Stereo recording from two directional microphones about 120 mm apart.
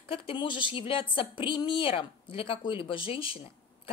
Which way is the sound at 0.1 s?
45° left (ahead or behind).